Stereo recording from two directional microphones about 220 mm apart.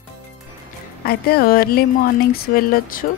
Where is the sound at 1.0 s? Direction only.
45° left (ahead or behind).